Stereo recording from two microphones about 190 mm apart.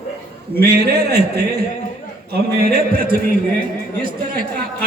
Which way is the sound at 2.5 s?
55° right (ahead or behind).